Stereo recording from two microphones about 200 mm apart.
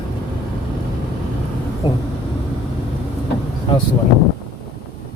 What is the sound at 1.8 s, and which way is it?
Speech, 20° left (ahead or behind).